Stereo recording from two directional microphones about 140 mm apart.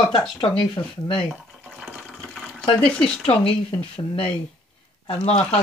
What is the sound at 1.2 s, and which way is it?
Sewing machine, centre (ahead or behind).